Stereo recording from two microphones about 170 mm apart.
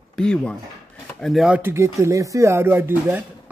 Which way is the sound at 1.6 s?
15° right (ahead or behind).